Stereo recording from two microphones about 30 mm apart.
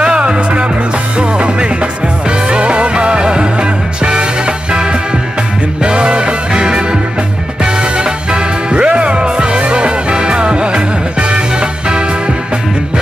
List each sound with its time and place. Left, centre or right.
0.0 s music: right